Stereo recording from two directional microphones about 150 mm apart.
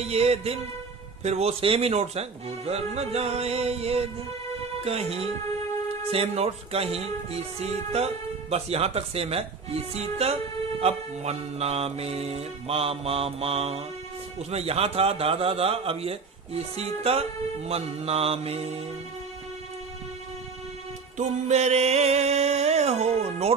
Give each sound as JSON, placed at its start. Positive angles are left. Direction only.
{"t": 0.0, "sound": "a man's voice", "side_deg": -45}
{"t": 21.2, "sound": "speech", "side_deg": -50}